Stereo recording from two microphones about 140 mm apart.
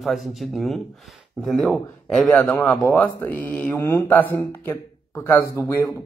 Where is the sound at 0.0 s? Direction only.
Centre (ahead or behind).